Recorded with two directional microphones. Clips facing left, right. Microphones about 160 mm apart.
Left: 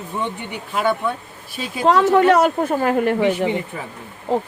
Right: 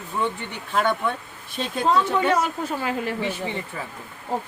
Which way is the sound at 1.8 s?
70° left (ahead or behind).